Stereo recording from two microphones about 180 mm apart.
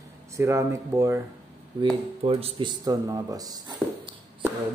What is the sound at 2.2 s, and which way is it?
Speech, 30° right (ahead or behind).